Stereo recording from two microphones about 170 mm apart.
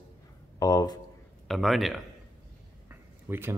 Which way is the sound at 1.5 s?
Centre (ahead or behind).